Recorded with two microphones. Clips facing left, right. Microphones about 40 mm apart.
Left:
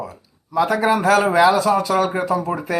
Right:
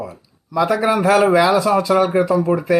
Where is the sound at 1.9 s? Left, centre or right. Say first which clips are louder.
Right 4 dB; right.